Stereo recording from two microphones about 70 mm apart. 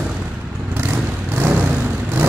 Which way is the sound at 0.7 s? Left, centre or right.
Right.